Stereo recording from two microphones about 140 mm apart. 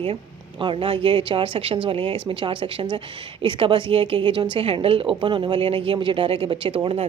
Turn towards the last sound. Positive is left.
turn(degrees=-40)  # may be behind; listen again after turning